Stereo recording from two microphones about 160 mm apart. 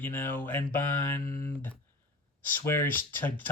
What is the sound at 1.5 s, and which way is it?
Speech, 10° left (ahead or behind).